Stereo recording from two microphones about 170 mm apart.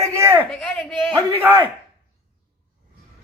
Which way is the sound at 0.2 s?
15° right (ahead or behind).